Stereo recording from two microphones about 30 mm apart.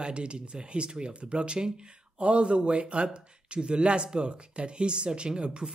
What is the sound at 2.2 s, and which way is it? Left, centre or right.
Speech, right.